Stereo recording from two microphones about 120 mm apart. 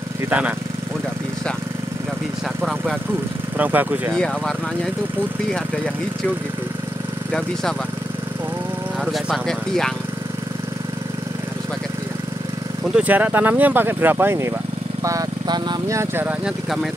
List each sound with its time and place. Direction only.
0.3 s speech: 10° right (ahead or behind)
2.6 s speech: 5° right (ahead or behind)
3.5 s speech: 15° right (ahead or behind)
9.0 s speech: centre (ahead or behind)
12.9 s speech: 15° right (ahead or behind)
15.0 s speech: 30° right (ahead or behind)
16.0 s speech: 20° right (ahead or behind)